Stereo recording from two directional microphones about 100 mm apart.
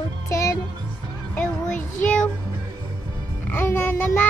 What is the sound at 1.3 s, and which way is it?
Music, 15° left (ahead or behind).